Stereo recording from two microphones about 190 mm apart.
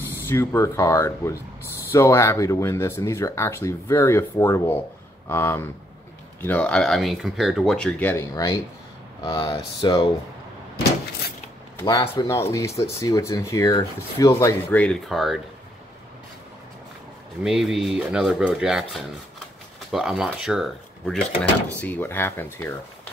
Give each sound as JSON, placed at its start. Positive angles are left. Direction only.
{"t": 0.1, "sound": "speech", "side_deg": 10}
{"t": 11.8, "sound": "speech", "side_deg": 20}
{"t": 17.4, "sound": "speech", "side_deg": 0}